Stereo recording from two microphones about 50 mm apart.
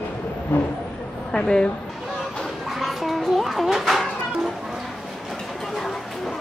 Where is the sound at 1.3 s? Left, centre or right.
Centre.